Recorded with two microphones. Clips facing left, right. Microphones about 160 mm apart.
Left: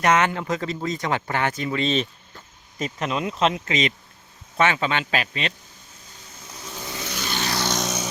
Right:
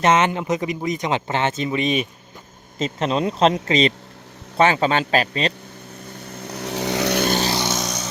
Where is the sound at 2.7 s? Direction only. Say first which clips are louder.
Right 5 dB; 25° right (ahead or behind).